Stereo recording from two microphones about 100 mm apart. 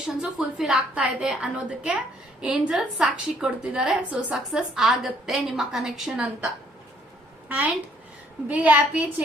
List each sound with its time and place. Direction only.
0.2 s a woman's voice: 10° right (ahead or behind)
7.4 s a sound: 15° right (ahead or behind)
8.4 s a woman's voice: 15° right (ahead or behind)